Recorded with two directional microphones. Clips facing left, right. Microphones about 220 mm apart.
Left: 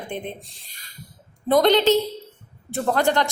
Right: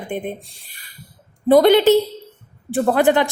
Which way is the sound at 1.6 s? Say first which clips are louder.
Right 4 dB; 15° right (ahead or behind).